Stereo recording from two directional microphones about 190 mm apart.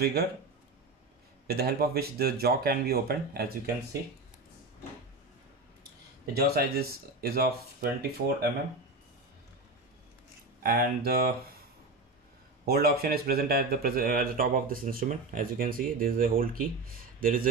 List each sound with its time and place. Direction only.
0.0 s speech: 55° right (ahead or behind)
1.5 s speech: 55° right (ahead or behind)
6.3 s speech: 55° right (ahead or behind)
10.6 s speech: 55° right (ahead or behind)
12.6 s speech: 55° right (ahead or behind)